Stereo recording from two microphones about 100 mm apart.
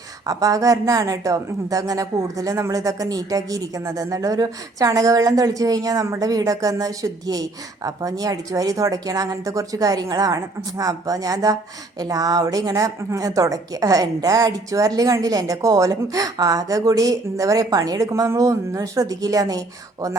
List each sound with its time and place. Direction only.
0.3 s a woman's voice: 35° right (ahead or behind)